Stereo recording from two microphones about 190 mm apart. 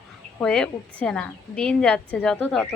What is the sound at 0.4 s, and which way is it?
Speech, 5° left (ahead or behind).